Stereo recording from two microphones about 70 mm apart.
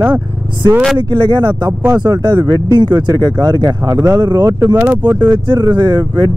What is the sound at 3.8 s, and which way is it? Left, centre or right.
Speech, right.